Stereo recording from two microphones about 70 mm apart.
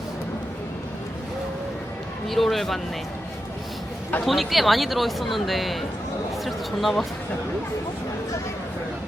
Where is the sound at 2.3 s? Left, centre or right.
Centre.